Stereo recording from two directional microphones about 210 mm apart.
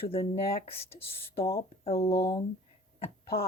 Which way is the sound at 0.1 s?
30° left (ahead or behind).